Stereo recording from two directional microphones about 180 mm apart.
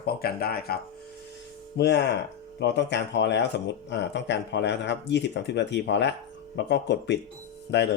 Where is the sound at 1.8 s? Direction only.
75° left (ahead or behind).